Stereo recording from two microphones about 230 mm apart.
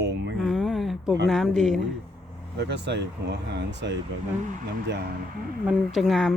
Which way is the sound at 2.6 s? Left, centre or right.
Right.